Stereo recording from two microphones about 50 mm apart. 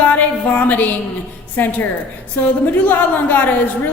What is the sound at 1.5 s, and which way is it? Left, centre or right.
A woman's voice, left.